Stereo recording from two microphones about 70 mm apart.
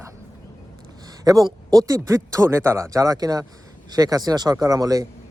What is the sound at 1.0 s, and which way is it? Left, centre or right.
Speech, right.